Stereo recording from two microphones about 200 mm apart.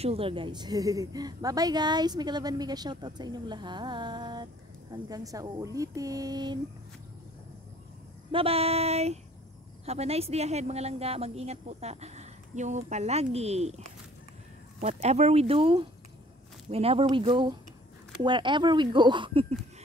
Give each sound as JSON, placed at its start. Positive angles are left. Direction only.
{"t": 0.0, "sound": "a woman's voice", "side_deg": -30}
{"t": 8.3, "sound": "a woman's voice", "side_deg": -30}